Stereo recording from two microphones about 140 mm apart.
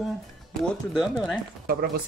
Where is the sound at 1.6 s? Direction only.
90° right.